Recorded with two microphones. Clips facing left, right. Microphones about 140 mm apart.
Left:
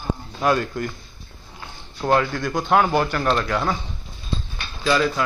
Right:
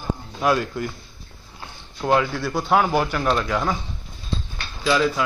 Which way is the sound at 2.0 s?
5° right (ahead or behind).